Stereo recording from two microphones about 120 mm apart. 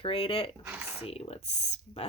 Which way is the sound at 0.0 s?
50° left (ahead or behind).